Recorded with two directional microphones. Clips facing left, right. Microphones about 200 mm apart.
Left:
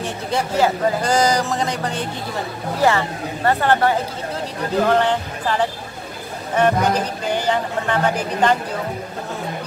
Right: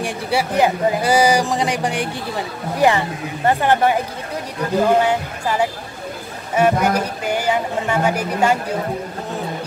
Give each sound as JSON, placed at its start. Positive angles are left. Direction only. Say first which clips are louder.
{"t": 0.0, "sound": "speech", "louder": "right 2 dB", "side_deg": -10}